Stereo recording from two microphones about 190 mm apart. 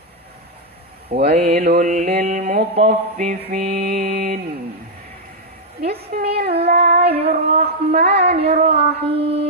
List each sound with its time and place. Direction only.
1.3 s mantra: 35° right (ahead or behind)
5.8 s mantra: 35° right (ahead or behind)
6.4 s child singing: 55° right (ahead or behind)
7.0 s female singing: 30° right (ahead or behind)
7.3 s speech: 50° right (ahead or behind)
8.0 s mantra: 35° right (ahead or behind)